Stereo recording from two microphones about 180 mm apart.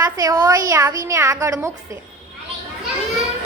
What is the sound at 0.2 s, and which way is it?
A woman's voice, 20° right (ahead or behind).